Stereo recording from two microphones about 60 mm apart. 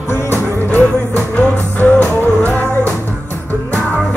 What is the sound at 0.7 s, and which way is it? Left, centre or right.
Music, left.